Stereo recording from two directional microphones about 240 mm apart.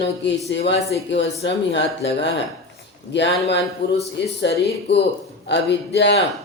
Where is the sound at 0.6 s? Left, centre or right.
Left.